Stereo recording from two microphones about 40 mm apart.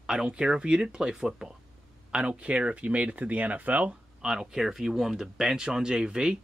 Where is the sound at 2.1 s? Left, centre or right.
Right.